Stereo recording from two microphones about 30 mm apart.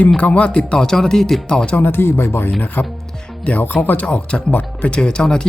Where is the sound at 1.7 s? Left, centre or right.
Left.